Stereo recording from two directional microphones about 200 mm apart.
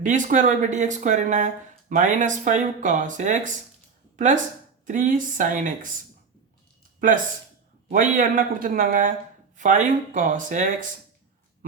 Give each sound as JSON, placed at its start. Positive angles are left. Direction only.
{"t": 0.0, "sound": "speech", "side_deg": -40}
{"t": 4.9, "sound": "speech", "side_deg": -40}
{"t": 7.9, "sound": "speech", "side_deg": -40}